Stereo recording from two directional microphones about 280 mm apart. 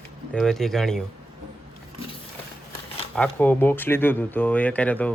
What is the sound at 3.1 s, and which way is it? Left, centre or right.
Speech, centre.